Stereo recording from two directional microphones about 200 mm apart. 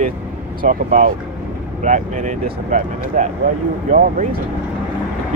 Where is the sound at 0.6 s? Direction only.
40° right (ahead or behind).